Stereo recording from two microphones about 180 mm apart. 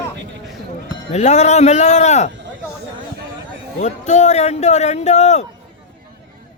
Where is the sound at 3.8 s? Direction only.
40° left (ahead or behind).